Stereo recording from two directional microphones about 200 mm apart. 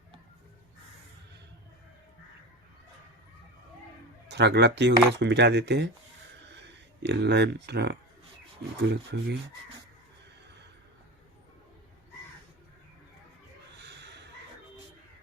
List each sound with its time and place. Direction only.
4.3 s speech: 60° right (ahead or behind)